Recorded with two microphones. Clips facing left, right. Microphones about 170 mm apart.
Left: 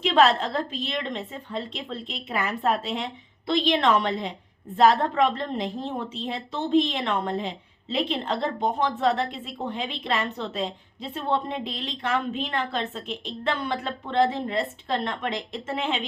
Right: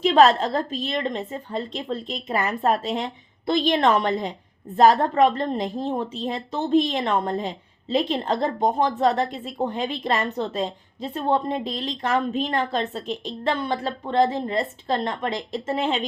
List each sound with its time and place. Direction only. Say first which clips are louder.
0.0 s a woman's voice: right 4 dB; 40° right (ahead or behind)